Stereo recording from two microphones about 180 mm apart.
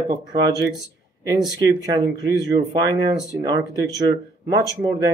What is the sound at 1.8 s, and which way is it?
Speech, 20° right (ahead or behind).